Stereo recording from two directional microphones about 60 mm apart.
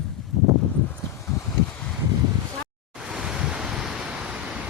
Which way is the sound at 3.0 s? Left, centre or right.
Centre.